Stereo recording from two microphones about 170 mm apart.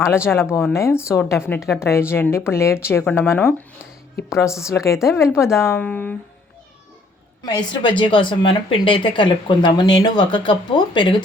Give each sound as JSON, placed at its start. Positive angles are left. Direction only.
{"t": 0.3, "sound": "speech", "side_deg": 15}
{"t": 7.4, "sound": "a woman's voice", "side_deg": 25}